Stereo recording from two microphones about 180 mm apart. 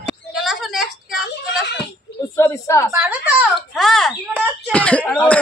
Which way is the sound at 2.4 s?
15° left (ahead or behind).